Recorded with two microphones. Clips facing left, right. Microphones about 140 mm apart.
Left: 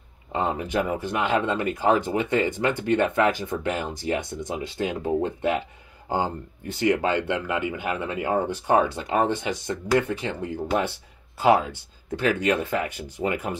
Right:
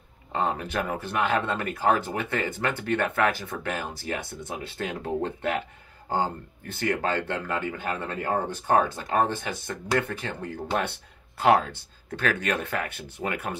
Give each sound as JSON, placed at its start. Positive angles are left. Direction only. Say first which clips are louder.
{"t": 0.3, "sound": "speech", "louder": "left 2 dB", "side_deg": 15}